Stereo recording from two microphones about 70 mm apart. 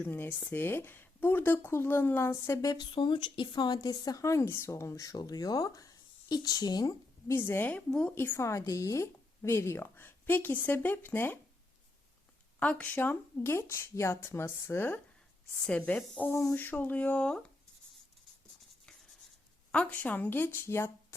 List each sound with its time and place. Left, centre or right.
0.1 s speech: left
2.6 s speech: left
3.5 s a woman's voice: left
4.9 s speech: left
7.3 s speech: left
7.7 s speech: centre
8.1 s speech: left
8.4 s speech: left
12.5 s speech: centre
15.9 s speech: centre
19.7 s speech: centre; by 20.9 s left